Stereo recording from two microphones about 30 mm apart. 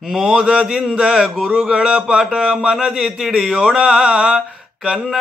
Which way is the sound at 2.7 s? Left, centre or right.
Centre.